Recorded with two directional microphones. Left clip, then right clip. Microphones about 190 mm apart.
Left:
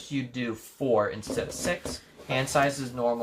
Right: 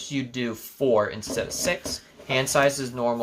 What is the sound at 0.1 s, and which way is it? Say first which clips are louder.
Speech: right 2 dB; 45° right (ahead or behind).